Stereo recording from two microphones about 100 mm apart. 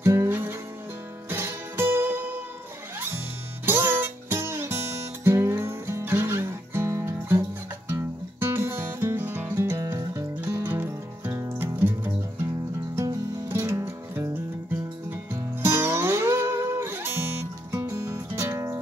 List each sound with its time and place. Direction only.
0.0 s music: 30° right (ahead or behind)
3.6 s music: 20° right (ahead or behind)
15.3 s music: 25° right (ahead or behind)